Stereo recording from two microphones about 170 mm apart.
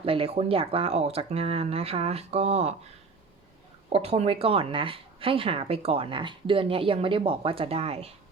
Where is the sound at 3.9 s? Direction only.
35° right (ahead or behind).